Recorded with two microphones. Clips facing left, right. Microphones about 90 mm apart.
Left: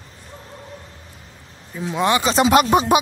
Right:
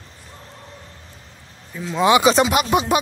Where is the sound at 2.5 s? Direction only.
40° left (ahead or behind).